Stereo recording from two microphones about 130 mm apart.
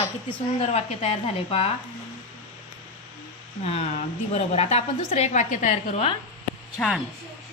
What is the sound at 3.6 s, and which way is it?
A woman's voice, 50° left (ahead or behind).